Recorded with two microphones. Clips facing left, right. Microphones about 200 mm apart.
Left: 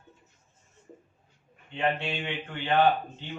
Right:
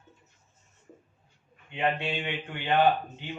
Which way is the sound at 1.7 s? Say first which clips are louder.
Even; 15° right (ahead or behind).